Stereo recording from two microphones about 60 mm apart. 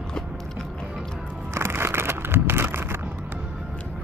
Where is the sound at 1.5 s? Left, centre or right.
Right.